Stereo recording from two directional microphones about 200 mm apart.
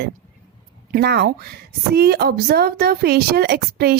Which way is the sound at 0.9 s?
55° right (ahead or behind).